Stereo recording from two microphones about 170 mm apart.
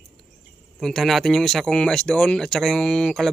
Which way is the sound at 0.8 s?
Centre (ahead or behind).